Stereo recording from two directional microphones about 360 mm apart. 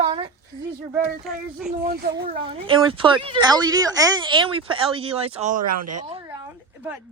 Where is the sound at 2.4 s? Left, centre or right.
Centre.